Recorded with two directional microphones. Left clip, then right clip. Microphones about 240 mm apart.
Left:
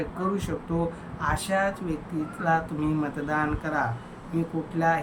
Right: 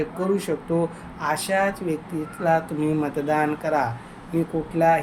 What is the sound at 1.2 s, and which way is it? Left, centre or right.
Speech, centre.